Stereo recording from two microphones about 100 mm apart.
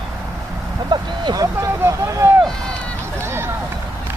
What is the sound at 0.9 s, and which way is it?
Speech, 45° right (ahead or behind).